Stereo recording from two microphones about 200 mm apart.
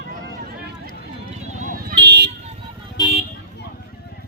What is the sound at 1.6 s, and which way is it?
Vehicle, 45° right (ahead or behind).